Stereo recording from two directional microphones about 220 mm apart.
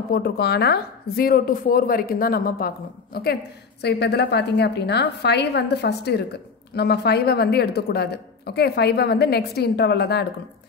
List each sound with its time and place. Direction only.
0.1 s a woman's voice: 45° left (ahead or behind)